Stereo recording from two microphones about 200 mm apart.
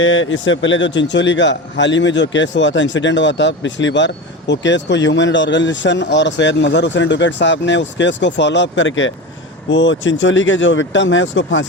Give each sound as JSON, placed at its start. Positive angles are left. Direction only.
{"t": 0.0, "sound": "a man's voice", "side_deg": 70}